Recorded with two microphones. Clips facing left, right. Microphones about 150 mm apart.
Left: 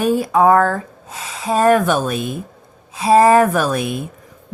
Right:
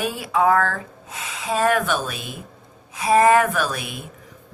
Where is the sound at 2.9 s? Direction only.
30° left (ahead or behind); by 4.0 s 50° left (ahead or behind).